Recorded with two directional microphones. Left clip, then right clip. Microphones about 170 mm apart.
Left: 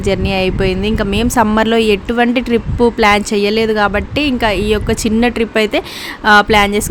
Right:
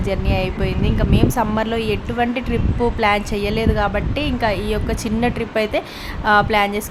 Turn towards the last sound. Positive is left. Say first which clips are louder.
# left 6 dB
turn(degrees=35)  # may be behind; listen again after turning